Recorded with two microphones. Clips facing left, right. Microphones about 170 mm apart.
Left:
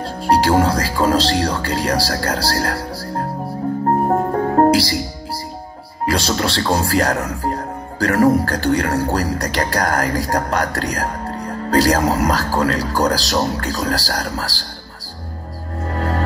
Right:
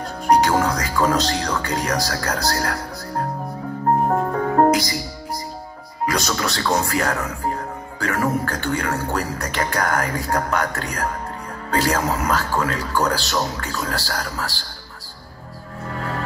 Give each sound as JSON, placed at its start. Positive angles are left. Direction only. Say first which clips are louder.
{"t": 0.0, "sound": "speech", "louder": "left 1 dB", "side_deg": 30}
{"t": 4.3, "sound": "music", "louder": "left 3 dB", "side_deg": 40}
{"t": 6.0, "sound": "speech", "louder": "left 4 dB", "side_deg": 30}
{"t": 15.9, "sound": "music", "louder": "left 6 dB", "side_deg": 40}